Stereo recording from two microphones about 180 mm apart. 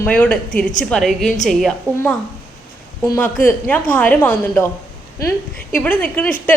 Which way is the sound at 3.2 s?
10° left (ahead or behind).